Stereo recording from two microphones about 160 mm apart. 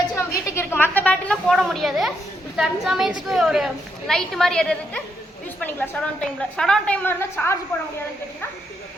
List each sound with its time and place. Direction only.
0.4 s a woman's voice: 15° left (ahead or behind)